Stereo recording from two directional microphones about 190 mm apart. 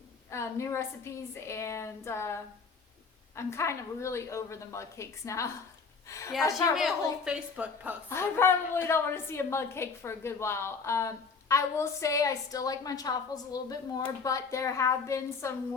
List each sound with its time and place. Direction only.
0.3 s a woman's voice: 15° left (ahead or behind)
6.7 s a woman's voice: 5° right (ahead or behind)
8.1 s a woman's voice: 15° left (ahead or behind)